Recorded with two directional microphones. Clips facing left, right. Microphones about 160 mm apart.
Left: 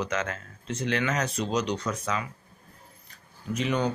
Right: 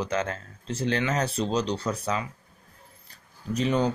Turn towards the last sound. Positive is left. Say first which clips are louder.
# right 2 dB
turn(degrees=-30)  # may be behind; listen again after turning